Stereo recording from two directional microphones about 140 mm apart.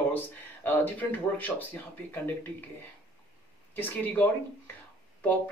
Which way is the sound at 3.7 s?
15° left (ahead or behind).